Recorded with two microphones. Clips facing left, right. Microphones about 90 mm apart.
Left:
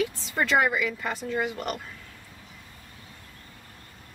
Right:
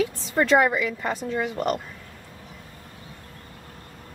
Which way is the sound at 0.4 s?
30° right (ahead or behind).